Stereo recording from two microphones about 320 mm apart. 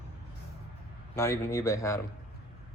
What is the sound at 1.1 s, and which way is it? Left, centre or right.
Speech, centre.